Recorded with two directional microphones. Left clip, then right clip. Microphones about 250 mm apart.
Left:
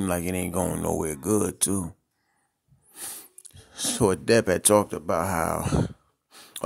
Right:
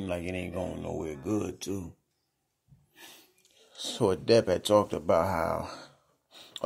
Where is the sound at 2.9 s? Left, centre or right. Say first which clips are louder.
Left 8 dB; left.